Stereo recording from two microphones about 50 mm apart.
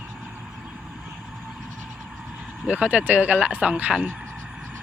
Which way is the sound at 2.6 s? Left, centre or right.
Right.